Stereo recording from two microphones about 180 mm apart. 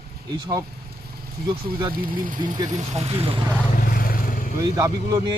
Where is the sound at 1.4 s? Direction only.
25° right (ahead or behind).